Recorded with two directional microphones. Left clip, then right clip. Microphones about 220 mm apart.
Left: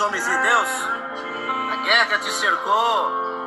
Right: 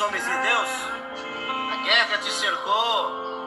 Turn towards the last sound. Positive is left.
turn(degrees=30)  # may be behind; listen again after turning